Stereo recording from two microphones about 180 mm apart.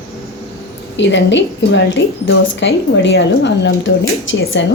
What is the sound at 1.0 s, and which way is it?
Speech, 80° left.